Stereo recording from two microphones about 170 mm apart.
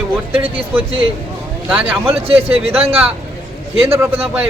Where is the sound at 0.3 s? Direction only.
35° right (ahead or behind).